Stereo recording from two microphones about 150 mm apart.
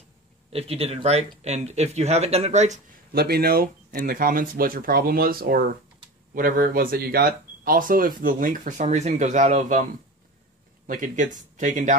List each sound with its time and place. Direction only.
0.5 s speech: 40° right (ahead or behind)
3.1 s speech: 90° right
6.3 s speech: 70° right (ahead or behind)
10.9 s speech: 55° right (ahead or behind)